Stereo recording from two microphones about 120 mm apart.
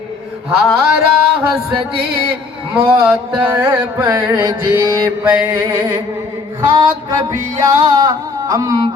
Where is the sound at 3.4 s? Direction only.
15° right (ahead or behind).